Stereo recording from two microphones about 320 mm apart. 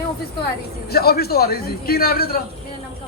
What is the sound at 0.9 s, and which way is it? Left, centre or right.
A man's voice, left.